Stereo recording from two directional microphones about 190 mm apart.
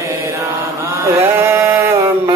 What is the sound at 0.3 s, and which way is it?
Chant, 15° right (ahead or behind).